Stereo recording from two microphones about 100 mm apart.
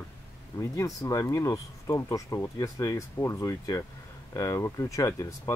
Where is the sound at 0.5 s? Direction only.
35° left (ahead or behind).